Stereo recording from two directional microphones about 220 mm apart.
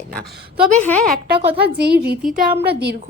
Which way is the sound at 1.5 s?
45° right (ahead or behind).